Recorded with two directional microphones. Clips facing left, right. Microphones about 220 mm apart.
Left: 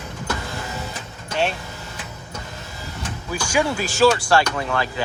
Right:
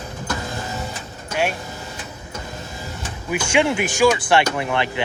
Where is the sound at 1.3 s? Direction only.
10° right (ahead or behind).